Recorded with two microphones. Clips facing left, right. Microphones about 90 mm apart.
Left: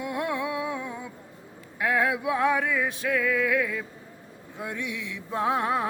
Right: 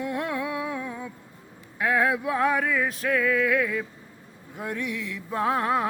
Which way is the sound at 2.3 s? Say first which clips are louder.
Even; 40° right (ahead or behind).